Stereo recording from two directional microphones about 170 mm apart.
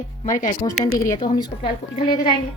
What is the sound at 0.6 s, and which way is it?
A woman's voice, 20° left (ahead or behind).